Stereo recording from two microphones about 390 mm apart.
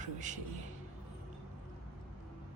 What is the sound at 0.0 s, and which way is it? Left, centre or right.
Music, centre.